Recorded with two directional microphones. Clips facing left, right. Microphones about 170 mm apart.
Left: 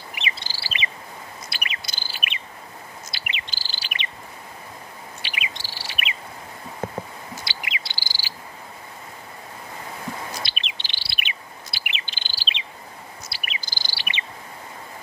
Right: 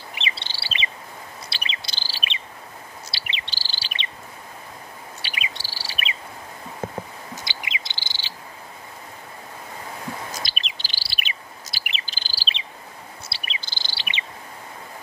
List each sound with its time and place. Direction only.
0.1 s chirp: 30° right (ahead or behind)
5.2 s chirp: 35° right (ahead or behind)
7.4 s cricket: 20° right (ahead or behind)
10.3 s chirp: 45° right (ahead or behind)
13.3 s bird vocalization: 30° right (ahead or behind)